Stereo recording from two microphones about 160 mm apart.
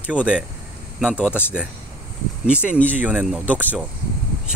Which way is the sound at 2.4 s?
5° right (ahead or behind).